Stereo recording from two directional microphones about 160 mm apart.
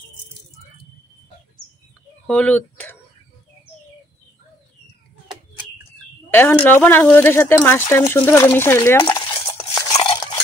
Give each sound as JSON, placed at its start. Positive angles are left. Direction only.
{"t": 2.2, "sound": "a sound", "side_deg": 10}
{"t": 6.3, "sound": "speech", "side_deg": 10}
{"t": 8.5, "sound": "stir", "side_deg": 15}